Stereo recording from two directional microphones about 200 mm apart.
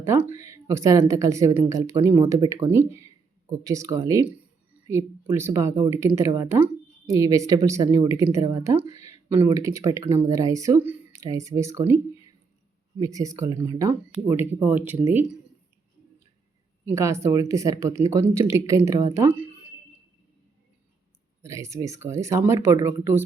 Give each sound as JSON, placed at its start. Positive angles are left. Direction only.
{"t": 0.0, "sound": "speech", "side_deg": -15}
{"t": 13.0, "sound": "speech", "side_deg": -15}
{"t": 16.8, "sound": "speech", "side_deg": -15}
{"t": 21.4, "sound": "speech", "side_deg": -15}